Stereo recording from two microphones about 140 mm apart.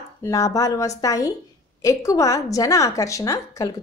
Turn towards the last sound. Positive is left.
turn(degrees=25)  # may be behind; listen again after turning